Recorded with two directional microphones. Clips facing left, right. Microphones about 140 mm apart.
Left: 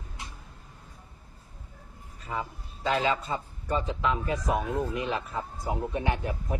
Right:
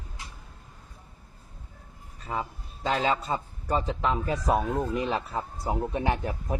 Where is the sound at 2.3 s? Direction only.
35° right (ahead or behind).